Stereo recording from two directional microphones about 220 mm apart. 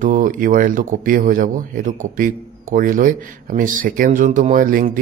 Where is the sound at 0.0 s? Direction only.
35° right (ahead or behind).